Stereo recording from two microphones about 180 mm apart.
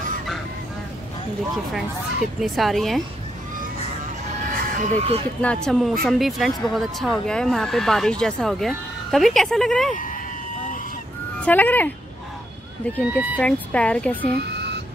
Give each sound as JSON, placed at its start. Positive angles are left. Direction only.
{"t": 2.4, "sound": "speech", "side_deg": 0}
{"t": 4.5, "sound": "a sound", "side_deg": -50}
{"t": 5.4, "sound": "speech", "side_deg": 5}
{"t": 11.4, "sound": "speech", "side_deg": 10}
{"t": 13.4, "sound": "speech", "side_deg": 5}